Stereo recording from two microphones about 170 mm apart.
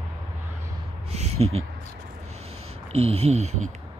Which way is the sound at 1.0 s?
40° right (ahead or behind).